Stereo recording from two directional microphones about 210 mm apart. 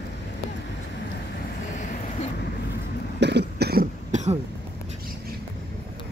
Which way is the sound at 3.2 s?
55° right (ahead or behind).